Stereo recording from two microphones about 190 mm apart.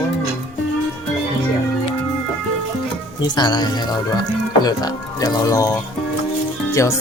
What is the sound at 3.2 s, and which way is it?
Speech, 20° left (ahead or behind).